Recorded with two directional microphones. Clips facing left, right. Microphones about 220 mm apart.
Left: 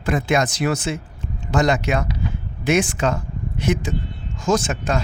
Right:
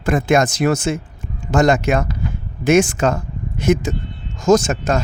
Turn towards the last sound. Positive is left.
turn(degrees=-45)  # may be behind; listen again after turning